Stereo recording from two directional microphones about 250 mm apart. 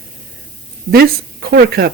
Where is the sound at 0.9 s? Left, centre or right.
Right.